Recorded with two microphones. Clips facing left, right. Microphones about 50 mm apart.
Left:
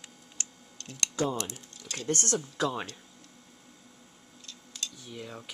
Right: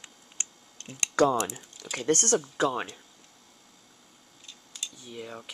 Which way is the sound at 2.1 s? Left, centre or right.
Right.